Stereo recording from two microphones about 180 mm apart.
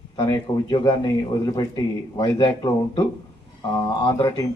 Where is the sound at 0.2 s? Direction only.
25° left (ahead or behind).